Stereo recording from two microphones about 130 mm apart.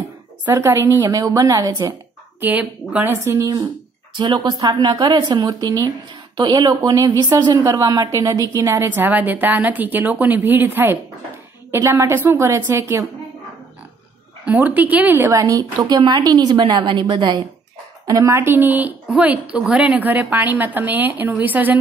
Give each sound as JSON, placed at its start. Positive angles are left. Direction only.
{"t": 0.5, "sound": "a woman's voice", "side_deg": -20}
{"t": 2.4, "sound": "a woman's voice", "side_deg": -15}
{"t": 4.2, "sound": "a woman's voice", "side_deg": -35}
{"t": 14.4, "sound": "a woman's voice", "side_deg": -10}